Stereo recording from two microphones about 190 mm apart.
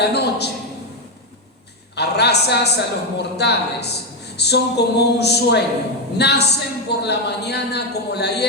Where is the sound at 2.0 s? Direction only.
60° left (ahead or behind).